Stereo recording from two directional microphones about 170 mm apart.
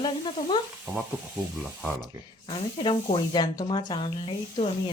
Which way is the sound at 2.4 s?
30° left (ahead or behind).